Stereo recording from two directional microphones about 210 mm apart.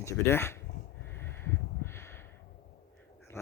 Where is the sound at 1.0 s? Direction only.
10° left (ahead or behind).